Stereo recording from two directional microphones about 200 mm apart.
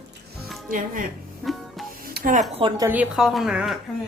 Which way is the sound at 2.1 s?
45° right (ahead or behind).